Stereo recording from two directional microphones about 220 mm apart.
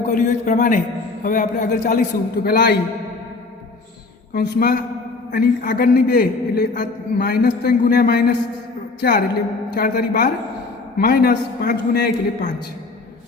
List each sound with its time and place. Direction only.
0.0 s a man's voice: 35° left (ahead or behind)
4.4 s a man's voice: 45° left (ahead or behind)